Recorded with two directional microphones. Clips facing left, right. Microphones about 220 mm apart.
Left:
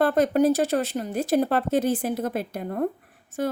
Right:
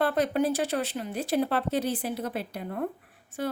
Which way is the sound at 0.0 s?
45° left (ahead or behind).